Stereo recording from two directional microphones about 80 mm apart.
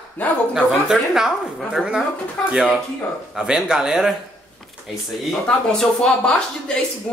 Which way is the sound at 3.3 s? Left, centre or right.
Centre.